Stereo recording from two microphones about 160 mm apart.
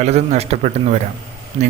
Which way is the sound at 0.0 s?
45° right (ahead or behind).